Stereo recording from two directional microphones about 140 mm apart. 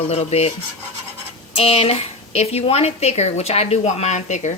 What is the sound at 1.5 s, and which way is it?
A woman's voice, 45° left (ahead or behind).